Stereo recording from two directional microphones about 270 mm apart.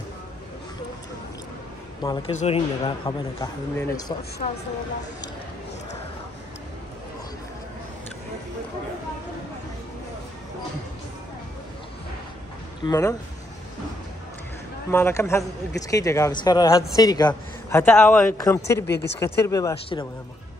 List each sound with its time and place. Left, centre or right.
2.0 s a man's voice: left
4.4 s a man's voice: left
12.8 s a man's voice: centre
14.9 s a man's voice: centre
18.9 s speech: left
19.1 s a man's voice: centre